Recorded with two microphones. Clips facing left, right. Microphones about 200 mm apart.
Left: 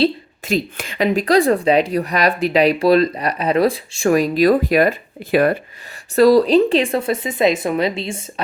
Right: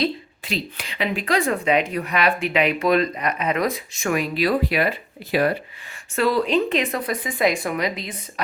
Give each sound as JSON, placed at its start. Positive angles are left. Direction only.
{"t": 0.4, "sound": "speech", "side_deg": 45}
{"t": 6.1, "sound": "speech", "side_deg": 35}